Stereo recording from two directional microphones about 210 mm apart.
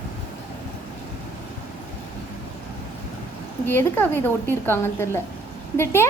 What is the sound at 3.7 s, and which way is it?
A woman's voice, 10° left (ahead or behind).